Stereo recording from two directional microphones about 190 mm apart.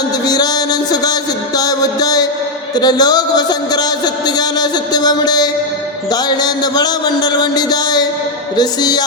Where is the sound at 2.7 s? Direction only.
20° left (ahead or behind).